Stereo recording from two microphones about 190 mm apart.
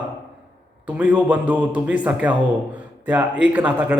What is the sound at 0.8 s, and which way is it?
A man's voice, 5° right (ahead or behind).